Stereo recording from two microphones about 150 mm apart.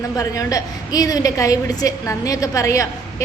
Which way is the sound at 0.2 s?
25° left (ahead or behind).